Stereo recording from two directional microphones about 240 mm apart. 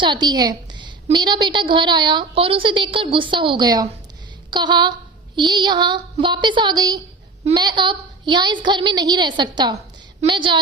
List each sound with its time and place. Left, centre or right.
0.0 s a woman's voice: centre